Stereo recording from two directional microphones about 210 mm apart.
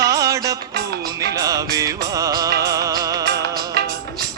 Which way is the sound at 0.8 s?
50° right (ahead or behind).